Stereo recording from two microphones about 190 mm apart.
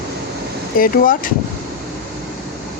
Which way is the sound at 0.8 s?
45° left (ahead or behind).